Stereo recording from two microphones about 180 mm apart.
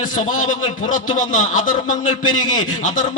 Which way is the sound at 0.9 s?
45° left (ahead or behind).